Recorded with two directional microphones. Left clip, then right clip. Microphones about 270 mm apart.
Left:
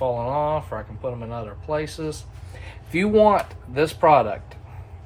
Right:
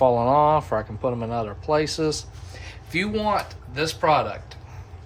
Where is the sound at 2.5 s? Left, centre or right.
Centre.